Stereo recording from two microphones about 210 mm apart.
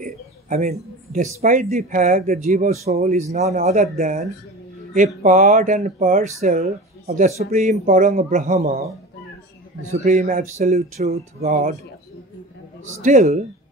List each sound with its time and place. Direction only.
0.0 s a sound: 35° right (ahead or behind)
1.1 s speech: 40° right (ahead or behind)
9.8 s speech: 35° right (ahead or behind)
13.0 s speech: 35° right (ahead or behind)